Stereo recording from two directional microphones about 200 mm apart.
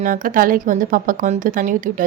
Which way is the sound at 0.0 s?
45° right (ahead or behind).